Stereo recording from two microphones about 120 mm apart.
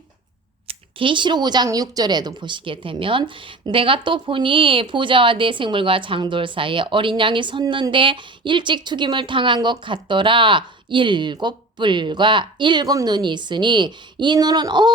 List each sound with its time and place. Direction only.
0.7 s speech: 45° right (ahead or behind)